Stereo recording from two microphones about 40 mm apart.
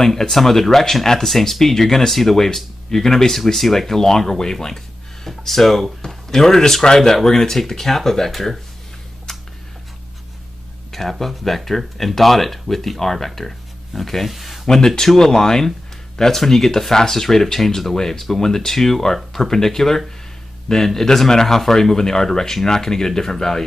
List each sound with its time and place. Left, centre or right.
0.0 s speech: centre
10.9 s speech: centre